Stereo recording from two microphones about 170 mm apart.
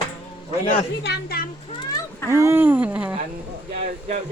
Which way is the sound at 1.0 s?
70° left (ahead or behind).